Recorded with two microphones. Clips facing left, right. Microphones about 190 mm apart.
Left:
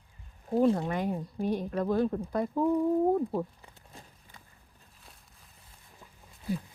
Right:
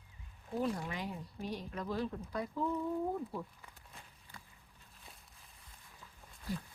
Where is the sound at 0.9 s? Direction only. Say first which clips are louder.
Left 10 dB; 50° left (ahead or behind).